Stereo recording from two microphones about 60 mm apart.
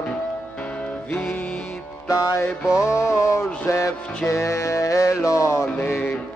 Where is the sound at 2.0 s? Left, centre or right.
Left.